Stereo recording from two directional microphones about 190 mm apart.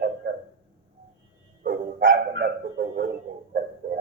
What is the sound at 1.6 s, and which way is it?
Dog, 50° right (ahead or behind).